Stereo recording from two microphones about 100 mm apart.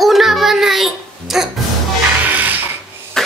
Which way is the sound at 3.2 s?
5° left (ahead or behind).